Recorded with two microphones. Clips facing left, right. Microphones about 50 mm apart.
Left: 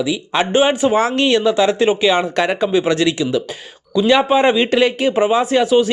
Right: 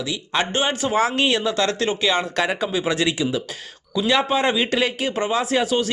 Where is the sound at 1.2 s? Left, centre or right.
Centre.